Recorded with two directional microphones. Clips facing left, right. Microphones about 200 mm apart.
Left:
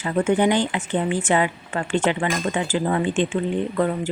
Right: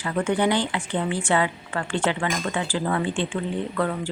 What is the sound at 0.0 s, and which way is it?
A woman's voice, 25° left (ahead or behind).